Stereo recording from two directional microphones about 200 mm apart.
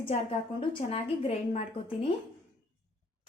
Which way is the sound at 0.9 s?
30° left (ahead or behind).